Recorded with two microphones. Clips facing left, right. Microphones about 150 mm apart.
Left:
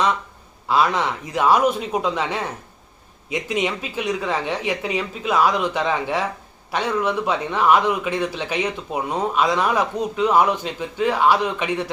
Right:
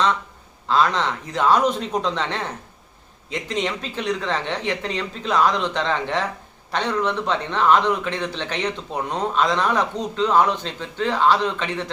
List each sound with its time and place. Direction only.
0.7 s a man's voice: 10° left (ahead or behind)